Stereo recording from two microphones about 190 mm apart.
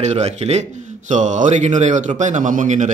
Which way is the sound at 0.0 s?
35° right (ahead or behind).